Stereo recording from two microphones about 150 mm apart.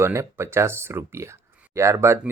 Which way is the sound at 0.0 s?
15° right (ahead or behind).